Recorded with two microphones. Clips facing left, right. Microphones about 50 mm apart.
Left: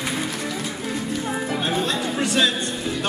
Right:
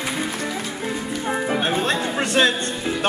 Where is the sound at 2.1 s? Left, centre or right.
Right.